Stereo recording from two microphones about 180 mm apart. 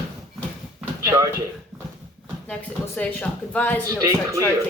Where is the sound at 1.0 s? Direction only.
15° right (ahead or behind).